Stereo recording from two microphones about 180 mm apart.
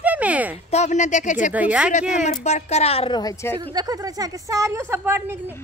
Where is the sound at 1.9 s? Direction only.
40° left (ahead or behind).